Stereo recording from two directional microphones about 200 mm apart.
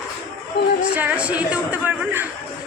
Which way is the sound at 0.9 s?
5° right (ahead or behind).